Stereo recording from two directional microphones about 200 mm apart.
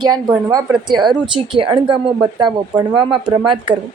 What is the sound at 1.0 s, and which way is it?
Speech, 25° right (ahead or behind).